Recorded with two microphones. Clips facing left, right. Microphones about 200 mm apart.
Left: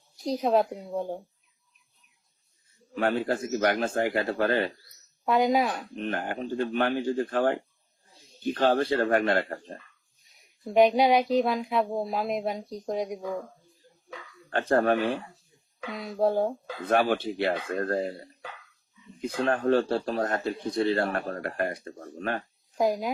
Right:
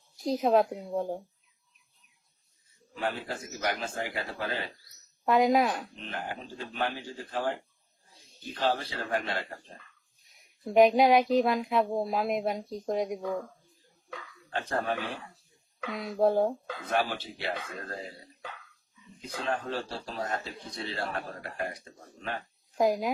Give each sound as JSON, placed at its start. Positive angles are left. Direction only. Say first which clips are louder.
{"t": 0.2, "sound": "speech", "louder": "even", "side_deg": 0}
{"t": 2.9, "sound": "speech", "louder": "left 8 dB", "side_deg": 60}
{"t": 5.2, "sound": "speech", "louder": "even", "side_deg": 0}
{"t": 6.0, "sound": "speech", "louder": "left 7 dB", "side_deg": 55}
{"t": 10.2, "sound": "speech", "louder": "even", "side_deg": 0}
{"t": 14.5, "sound": "speech", "louder": "left 8 dB", "side_deg": 55}
{"t": 15.8, "sound": "speech", "louder": "even", "side_deg": 0}
{"t": 16.8, "sound": "speech", "louder": "left 7 dB", "side_deg": 55}
{"t": 22.8, "sound": "speech", "louder": "even", "side_deg": 0}